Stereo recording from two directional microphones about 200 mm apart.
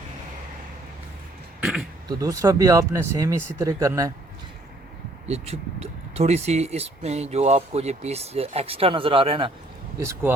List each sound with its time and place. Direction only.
1.6 s speech: centre (ahead or behind)
2.0 s speech: 15° right (ahead or behind)
5.3 s speech: 30° right (ahead or behind)
10.0 s speech: 15° right (ahead or behind)